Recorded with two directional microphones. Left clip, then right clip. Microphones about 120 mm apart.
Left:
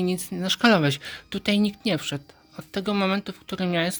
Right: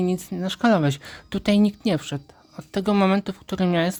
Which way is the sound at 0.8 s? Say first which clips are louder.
Left 1 dB; 25° right (ahead or behind).